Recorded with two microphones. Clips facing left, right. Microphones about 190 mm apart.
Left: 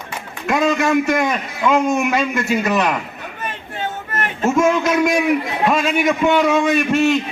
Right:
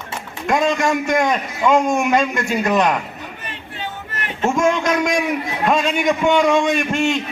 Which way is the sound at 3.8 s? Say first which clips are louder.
Left 6 dB; 50° left (ahead or behind).